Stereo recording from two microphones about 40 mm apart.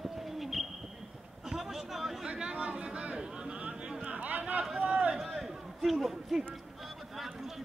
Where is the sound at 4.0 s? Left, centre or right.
Right.